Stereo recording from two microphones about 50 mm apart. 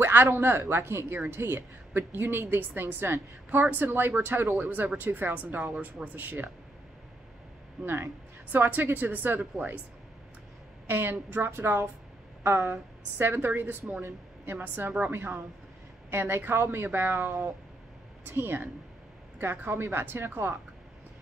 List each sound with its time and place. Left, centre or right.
0.0 s a woman's voice: right
7.8 s a woman's voice: right
8.5 s speech: right
10.9 s a woman's voice: right
13.2 s a woman's voice: right
14.0 s a woman's voice: right
16.1 s a woman's voice: right
18.3 s a woman's voice: right